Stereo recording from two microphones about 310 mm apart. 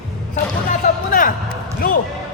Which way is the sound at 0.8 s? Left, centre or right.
Left.